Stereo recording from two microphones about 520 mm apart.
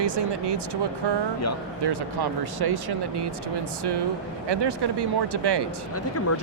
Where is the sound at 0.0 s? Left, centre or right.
Right.